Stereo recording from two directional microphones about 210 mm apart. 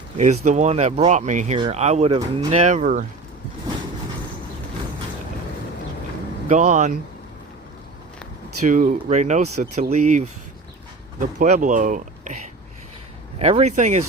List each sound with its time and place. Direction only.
0.2 s speech: 35° right (ahead or behind)
6.5 s speech: 35° right (ahead or behind)
8.6 s speech: 35° right (ahead or behind)
11.3 s speech: 35° right (ahead or behind)
13.4 s speech: 30° right (ahead or behind)